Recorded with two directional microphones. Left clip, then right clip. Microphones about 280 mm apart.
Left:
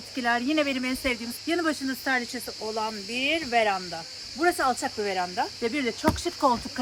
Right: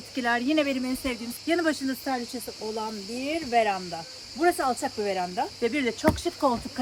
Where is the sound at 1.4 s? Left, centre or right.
Centre.